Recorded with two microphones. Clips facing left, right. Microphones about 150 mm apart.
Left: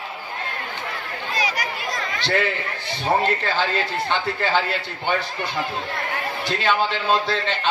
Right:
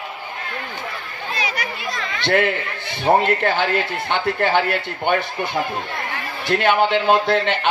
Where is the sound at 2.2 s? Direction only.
60° right (ahead or behind).